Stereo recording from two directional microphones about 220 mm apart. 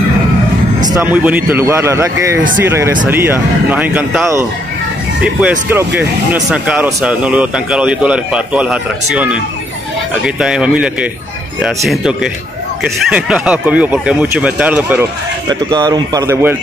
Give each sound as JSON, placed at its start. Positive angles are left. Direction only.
{"t": 0.9, "sound": "a man's voice", "side_deg": -5}
{"t": 15.4, "sound": "a man's voice", "side_deg": -20}